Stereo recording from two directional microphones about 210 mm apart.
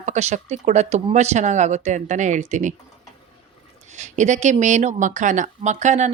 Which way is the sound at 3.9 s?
35° right (ahead or behind).